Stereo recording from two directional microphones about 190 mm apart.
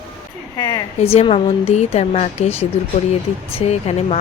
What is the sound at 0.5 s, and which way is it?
A woman's voice, 25° left (ahead or behind).